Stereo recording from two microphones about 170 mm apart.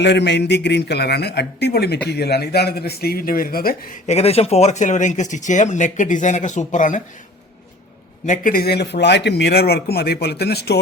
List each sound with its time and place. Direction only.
0.0 s speech: 90° left; by 3.8 s 60° left (ahead or behind)
4.0 s speech: 40° left (ahead or behind)
8.3 s speech: 60° left (ahead or behind)